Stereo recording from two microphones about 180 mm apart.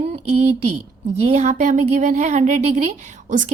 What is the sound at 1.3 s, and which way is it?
A woman's voice, 40° right (ahead or behind).